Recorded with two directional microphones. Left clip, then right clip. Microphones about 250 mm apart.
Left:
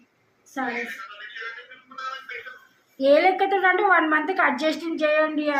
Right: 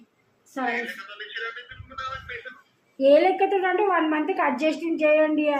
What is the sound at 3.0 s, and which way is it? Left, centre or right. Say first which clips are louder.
A woman's voice: even; centre.